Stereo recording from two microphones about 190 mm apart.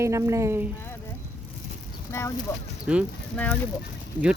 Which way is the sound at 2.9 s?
5° right (ahead or behind).